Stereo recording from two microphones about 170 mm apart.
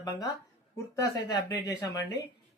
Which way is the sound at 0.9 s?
20° left (ahead or behind).